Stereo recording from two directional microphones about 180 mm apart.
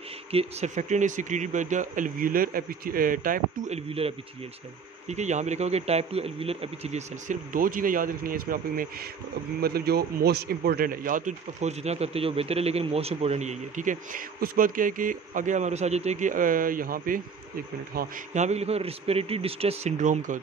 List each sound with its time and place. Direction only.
0.3 s a man's voice: 35° right (ahead or behind)